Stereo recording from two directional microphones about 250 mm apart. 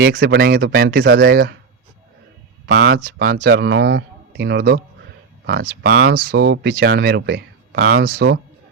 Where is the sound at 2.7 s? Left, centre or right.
Right.